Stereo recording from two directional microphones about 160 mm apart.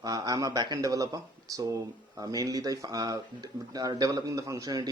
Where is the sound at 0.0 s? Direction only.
25° right (ahead or behind).